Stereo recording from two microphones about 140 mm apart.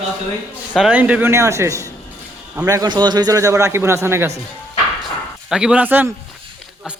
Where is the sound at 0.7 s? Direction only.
5° right (ahead or behind).